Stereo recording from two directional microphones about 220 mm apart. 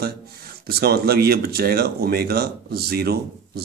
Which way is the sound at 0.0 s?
45° right (ahead or behind).